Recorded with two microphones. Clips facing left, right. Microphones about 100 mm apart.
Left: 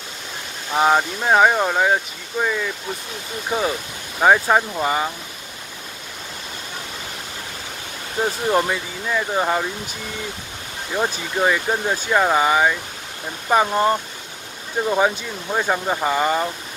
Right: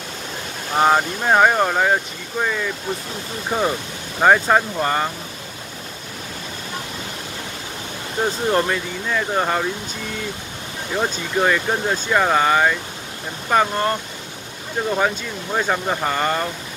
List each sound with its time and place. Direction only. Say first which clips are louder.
0.7 s speech: right 1 dB; 5° left (ahead or behind)
8.5 s speech: even; 10° left (ahead or behind)
10.9 s speech: even; 5° left (ahead or behind)